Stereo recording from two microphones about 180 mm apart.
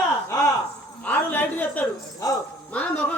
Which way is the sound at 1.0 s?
10° left (ahead or behind).